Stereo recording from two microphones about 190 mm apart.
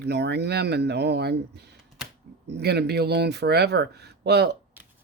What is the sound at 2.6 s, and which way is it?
Speech, 60° right (ahead or behind).